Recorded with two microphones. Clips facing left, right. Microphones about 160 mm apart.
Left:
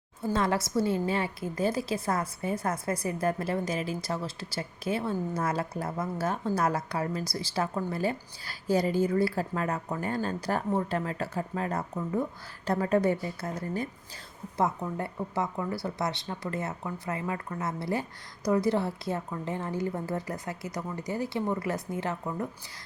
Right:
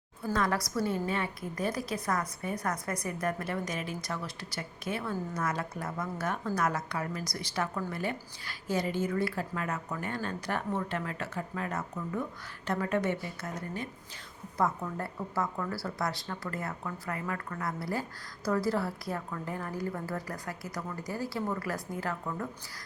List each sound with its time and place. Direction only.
0.2 s a woman's voice: 25° left (ahead or behind)
14.6 s a woman's voice: 20° left (ahead or behind)